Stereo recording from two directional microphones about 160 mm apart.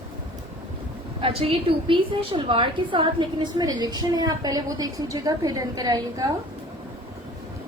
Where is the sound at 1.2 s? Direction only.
35° right (ahead or behind).